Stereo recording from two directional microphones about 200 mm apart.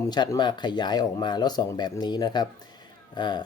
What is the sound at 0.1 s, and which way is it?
Speech, 20° left (ahead or behind).